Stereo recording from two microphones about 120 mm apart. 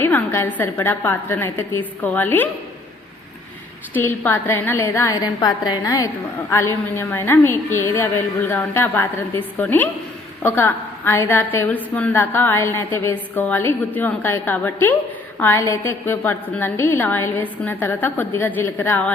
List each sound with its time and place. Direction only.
0.0 s a woman's voice: 20° left (ahead or behind)
3.9 s a woman's voice: 15° left (ahead or behind)